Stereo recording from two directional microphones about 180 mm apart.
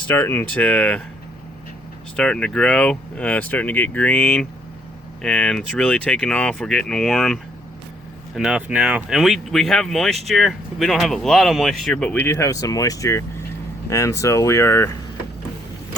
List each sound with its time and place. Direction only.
0.1 s speech: 10° left (ahead or behind)
2.1 s speech: 5° left (ahead or behind)
8.4 s speech: 5° right (ahead or behind); by 14.8 s 15° left (ahead or behind)